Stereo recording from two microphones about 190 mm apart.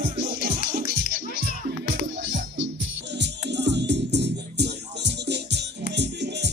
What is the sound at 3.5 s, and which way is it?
Music, 65° right (ahead or behind).